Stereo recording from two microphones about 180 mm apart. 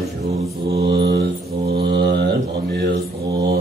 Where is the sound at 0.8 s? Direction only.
70° right (ahead or behind).